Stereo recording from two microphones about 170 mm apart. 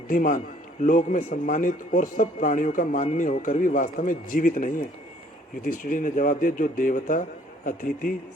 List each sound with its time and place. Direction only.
0.1 s a man's voice: 55° left (ahead or behind)